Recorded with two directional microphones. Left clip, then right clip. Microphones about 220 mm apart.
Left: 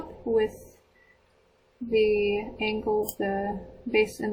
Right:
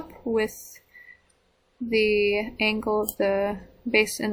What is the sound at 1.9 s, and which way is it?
Speech, 10° right (ahead or behind).